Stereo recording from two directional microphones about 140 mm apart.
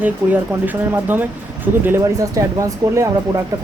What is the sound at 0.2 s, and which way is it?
Speech, 15° right (ahead or behind).